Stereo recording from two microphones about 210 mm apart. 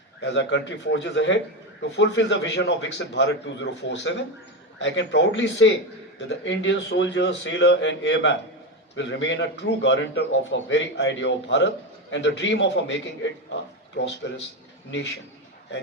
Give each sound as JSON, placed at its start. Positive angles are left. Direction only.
{"t": 0.2, "sound": "a man's voice", "side_deg": 60}
{"t": 14.2, "sound": "a man's voice", "side_deg": 60}